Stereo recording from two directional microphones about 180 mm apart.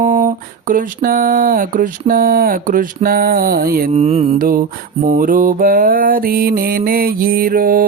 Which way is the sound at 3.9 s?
35° right (ahead or behind).